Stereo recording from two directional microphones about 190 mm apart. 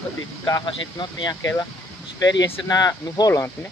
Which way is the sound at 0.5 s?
20° left (ahead or behind).